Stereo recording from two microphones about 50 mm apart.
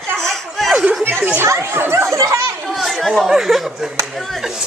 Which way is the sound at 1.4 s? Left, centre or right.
Right.